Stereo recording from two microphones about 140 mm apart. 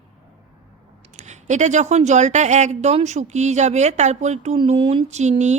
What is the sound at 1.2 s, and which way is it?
A woman's voice, 55° right (ahead or behind).